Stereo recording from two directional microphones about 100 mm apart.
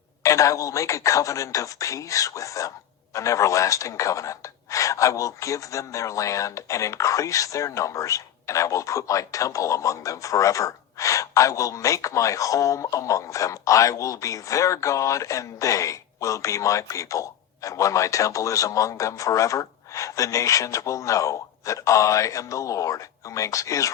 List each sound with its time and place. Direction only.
0.2 s speech: 30° left (ahead or behind)